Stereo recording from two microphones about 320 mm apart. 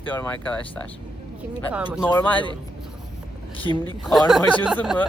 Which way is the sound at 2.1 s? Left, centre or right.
Centre.